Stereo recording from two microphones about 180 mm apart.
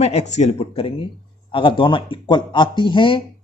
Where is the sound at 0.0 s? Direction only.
40° left (ahead or behind).